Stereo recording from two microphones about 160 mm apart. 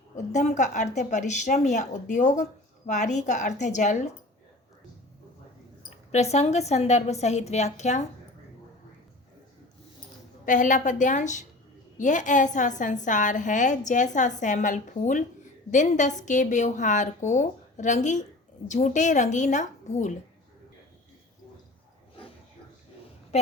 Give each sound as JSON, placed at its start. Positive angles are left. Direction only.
{"t": 0.3, "sound": "a woman's voice", "side_deg": 45}
{"t": 6.1, "sound": "a woman's voice", "side_deg": 45}
{"t": 10.4, "sound": "a woman's voice", "side_deg": 55}